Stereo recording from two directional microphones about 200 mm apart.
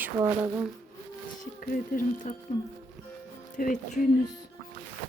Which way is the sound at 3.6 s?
40° left (ahead or behind).